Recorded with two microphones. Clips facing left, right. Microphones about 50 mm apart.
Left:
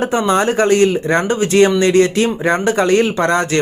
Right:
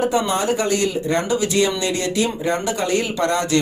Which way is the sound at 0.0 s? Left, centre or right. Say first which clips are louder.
Left 4 dB; left.